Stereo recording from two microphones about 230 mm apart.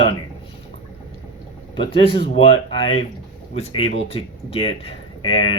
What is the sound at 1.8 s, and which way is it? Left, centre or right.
Speech, left.